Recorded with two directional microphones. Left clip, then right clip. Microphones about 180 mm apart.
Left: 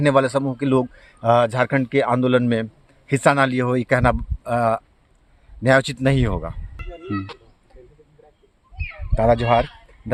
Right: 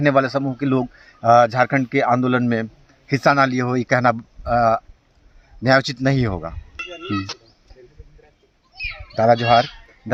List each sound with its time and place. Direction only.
0.0 s a man's voice: 35° left (ahead or behind)
9.1 s a man's voice: 30° left (ahead or behind)